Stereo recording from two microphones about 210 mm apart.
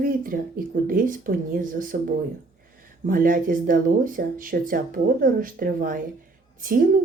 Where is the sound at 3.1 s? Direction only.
40° right (ahead or behind).